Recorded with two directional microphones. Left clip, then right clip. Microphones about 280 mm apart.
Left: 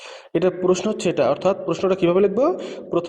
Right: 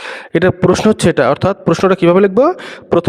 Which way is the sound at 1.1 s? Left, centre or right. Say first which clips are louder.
Right 6 dB; right.